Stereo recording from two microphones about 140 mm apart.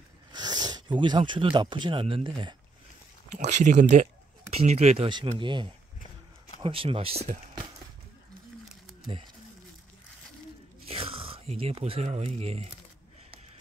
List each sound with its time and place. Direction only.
0.3 s speech: 30° right (ahead or behind)
3.3 s speech: 55° right (ahead or behind)
10.9 s speech: 40° right (ahead or behind)